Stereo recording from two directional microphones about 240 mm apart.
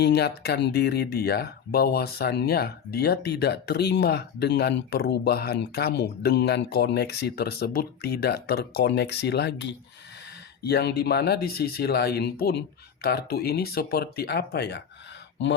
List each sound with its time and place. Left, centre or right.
0.0 s speech: left